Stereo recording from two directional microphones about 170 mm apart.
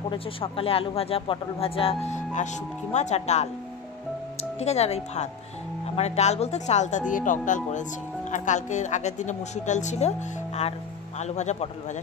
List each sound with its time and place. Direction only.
0.1 s speech: 30° left (ahead or behind)